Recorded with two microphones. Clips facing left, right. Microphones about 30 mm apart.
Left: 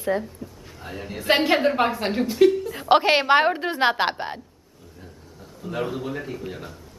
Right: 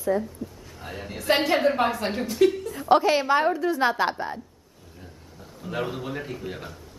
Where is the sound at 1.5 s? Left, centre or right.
Centre.